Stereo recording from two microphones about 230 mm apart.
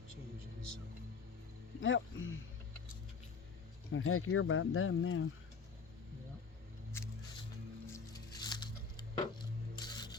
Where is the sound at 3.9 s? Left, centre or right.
Left.